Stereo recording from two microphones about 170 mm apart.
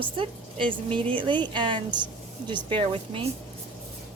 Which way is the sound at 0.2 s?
30° right (ahead or behind).